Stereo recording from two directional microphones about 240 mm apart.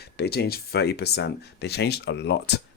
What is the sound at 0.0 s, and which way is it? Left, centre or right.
Speech, left.